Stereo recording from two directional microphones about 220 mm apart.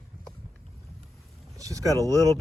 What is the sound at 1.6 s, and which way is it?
Vehicle, 15° right (ahead or behind).